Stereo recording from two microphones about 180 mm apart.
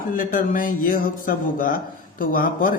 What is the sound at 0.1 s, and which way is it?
Speech, 50° left (ahead or behind).